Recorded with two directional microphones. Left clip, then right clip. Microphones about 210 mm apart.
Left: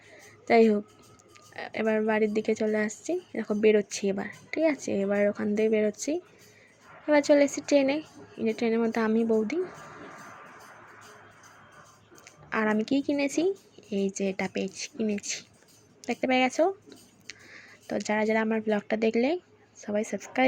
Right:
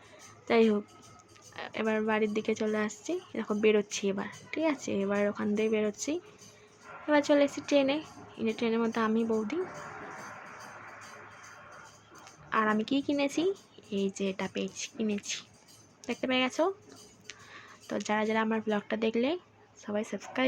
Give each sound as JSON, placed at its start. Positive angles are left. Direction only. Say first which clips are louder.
{"t": 0.4, "sound": "a woman's voice", "louder": "left 4 dB", "side_deg": 15}
{"t": 12.2, "sound": "a woman's voice", "louder": "even", "side_deg": 15}